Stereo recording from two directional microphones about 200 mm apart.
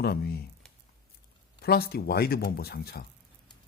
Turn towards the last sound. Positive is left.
turn(degrees=50)  # may be behind; listen again after turning